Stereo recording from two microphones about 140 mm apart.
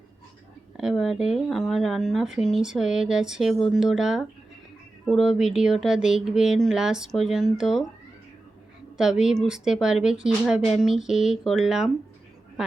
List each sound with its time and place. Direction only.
0.8 s speech: 5° right (ahead or behind)
9.0 s speech: 5° right (ahead or behind)